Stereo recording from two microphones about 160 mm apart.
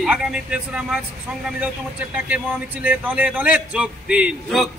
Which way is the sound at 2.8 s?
10° right (ahead or behind).